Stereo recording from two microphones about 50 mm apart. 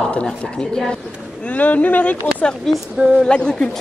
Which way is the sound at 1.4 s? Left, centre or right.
Left.